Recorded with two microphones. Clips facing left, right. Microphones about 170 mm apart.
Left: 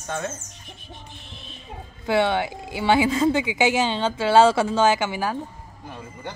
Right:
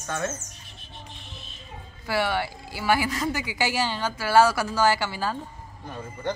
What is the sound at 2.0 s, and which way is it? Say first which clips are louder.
A woman's voice: left 5 dB; 20° left (ahead or behind).